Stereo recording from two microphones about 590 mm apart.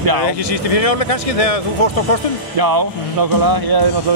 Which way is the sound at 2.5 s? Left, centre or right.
Right.